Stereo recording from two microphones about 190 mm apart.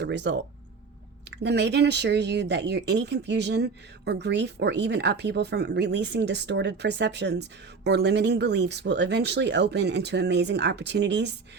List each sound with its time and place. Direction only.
0.0 s speech: 65° right (ahead or behind)